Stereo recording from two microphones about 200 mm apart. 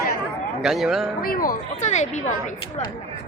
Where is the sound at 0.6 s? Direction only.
Centre (ahead or behind).